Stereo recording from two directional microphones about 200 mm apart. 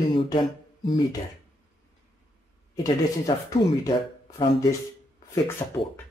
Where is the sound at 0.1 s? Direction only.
25° left (ahead or behind).